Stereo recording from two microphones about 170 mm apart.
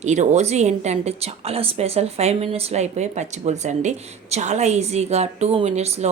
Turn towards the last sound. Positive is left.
turn(degrees=-40)  # may be behind; listen again after turning